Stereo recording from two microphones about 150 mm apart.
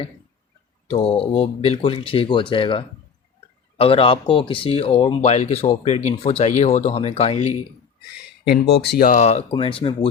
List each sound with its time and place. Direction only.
0.9 s speech: 40° left (ahead or behind)
8.4 s speech: 90° left
9.1 s speech: 45° left (ahead or behind)
9.5 s speech: 35° left (ahead or behind)